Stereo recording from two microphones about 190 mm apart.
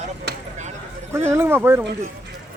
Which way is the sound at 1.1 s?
15° right (ahead or behind).